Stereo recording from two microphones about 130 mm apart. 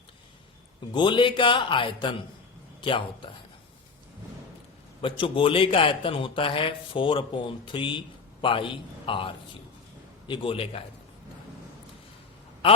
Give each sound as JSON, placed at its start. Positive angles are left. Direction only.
{"t": 0.9, "sound": "a man's voice", "side_deg": 40}
{"t": 5.0, "sound": "a man's voice", "side_deg": 40}